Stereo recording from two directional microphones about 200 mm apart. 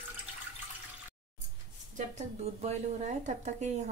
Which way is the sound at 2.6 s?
35° right (ahead or behind).